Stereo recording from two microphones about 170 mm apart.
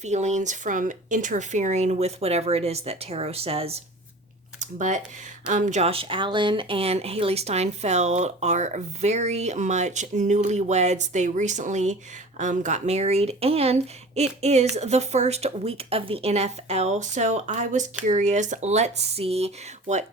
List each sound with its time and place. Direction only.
0.0 s speech: 45° right (ahead or behind)
4.6 s speech: 45° right (ahead or behind)